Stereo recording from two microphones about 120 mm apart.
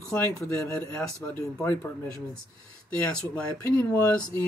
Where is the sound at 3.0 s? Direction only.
15° left (ahead or behind).